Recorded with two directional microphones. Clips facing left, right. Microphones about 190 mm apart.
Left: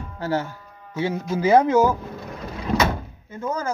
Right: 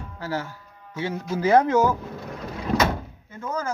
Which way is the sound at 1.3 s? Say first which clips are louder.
Left 2 dB; centre (ahead or behind).